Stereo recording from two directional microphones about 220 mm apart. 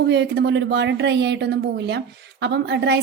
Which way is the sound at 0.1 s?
50° right (ahead or behind).